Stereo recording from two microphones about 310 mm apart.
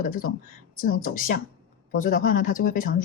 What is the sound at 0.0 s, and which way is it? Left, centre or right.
Speech, left.